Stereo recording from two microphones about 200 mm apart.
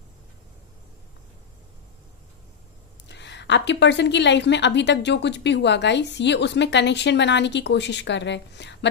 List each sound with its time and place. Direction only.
3.1 s a woman's voice: 60° left (ahead or behind)